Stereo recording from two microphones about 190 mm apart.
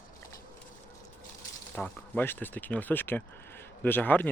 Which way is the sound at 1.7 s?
10° left (ahead or behind).